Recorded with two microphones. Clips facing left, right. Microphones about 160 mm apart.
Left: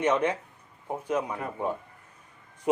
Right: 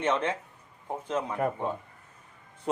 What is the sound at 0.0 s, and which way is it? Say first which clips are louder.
Speech: left 3 dB; 10° left (ahead or behind).